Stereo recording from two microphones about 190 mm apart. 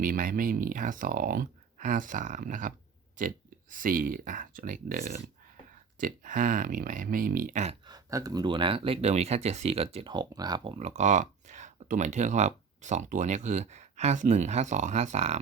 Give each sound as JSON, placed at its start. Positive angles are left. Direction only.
{"t": 0.0, "sound": "speech", "side_deg": -45}
{"t": 7.9, "sound": "speech", "side_deg": -20}